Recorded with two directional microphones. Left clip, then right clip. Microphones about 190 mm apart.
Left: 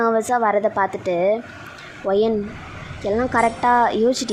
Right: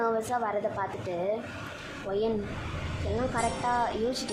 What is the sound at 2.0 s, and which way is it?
A woman's voice, 35° left (ahead or behind).